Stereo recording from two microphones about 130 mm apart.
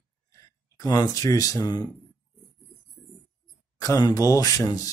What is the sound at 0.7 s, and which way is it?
Speech, 25° left (ahead or behind).